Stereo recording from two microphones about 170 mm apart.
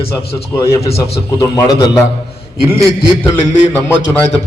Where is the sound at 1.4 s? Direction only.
20° left (ahead or behind).